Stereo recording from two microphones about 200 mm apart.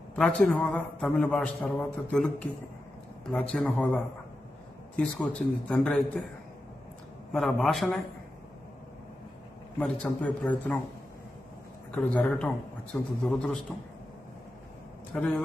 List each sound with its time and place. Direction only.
0.1 s a man's voice: 5° left (ahead or behind)
3.5 s a man's voice: 10° left (ahead or behind)
7.3 s a man's voice: centre (ahead or behind)
9.8 s a man's voice: 5° left (ahead or behind)
11.9 s a man's voice: 5° left (ahead or behind)
15.1 s a man's voice: 5° left (ahead or behind)